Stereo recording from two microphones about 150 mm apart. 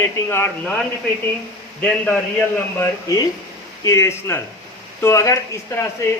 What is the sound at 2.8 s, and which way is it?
Speech, 20° left (ahead or behind).